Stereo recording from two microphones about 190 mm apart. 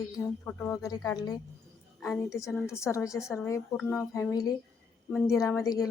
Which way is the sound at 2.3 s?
15° left (ahead or behind).